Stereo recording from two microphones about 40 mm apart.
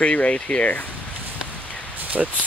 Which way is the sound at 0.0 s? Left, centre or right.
Left.